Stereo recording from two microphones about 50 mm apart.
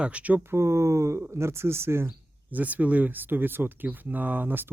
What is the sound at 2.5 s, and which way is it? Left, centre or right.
Speech, right.